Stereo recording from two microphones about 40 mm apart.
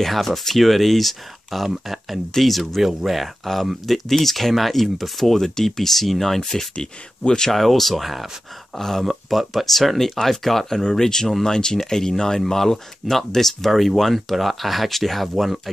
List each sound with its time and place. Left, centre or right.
0.0 s speech: centre
6.8 s speech: centre
7.5 s speech: centre
8.7 s speech: centre
9.3 s speech: centre